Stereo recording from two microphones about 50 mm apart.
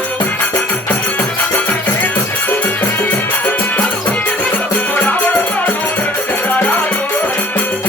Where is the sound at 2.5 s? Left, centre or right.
Left.